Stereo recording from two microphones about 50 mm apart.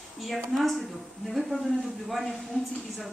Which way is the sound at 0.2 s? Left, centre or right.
Centre.